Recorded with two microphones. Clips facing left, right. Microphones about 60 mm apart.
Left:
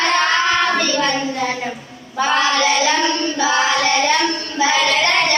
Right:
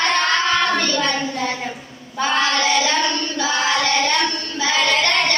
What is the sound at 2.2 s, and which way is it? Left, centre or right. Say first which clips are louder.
Child singing: left 3 dB; centre.